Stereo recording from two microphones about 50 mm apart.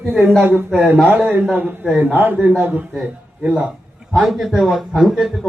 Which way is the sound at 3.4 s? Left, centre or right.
Right.